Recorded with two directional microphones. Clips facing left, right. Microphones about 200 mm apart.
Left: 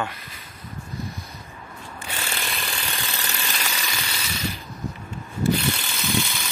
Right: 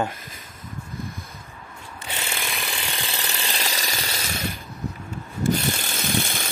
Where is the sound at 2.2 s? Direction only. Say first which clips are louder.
Right 1 dB; 10° right (ahead or behind).